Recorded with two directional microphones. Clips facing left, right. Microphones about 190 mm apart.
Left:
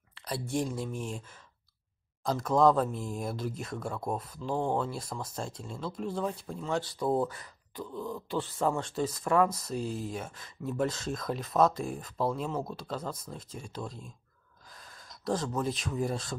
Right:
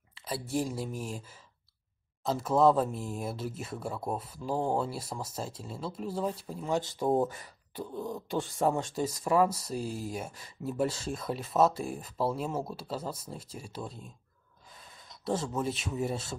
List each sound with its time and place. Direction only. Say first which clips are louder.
0.2 s speech: even; 5° right (ahead or behind); by 8.8 s 25° right (ahead or behind)
8.8 s speech: even; 10° right (ahead or behind)
14.7 s a sound: left 1 dB; 5° right (ahead or behind)
16.0 s speech: left 1 dB; 5° right (ahead or behind)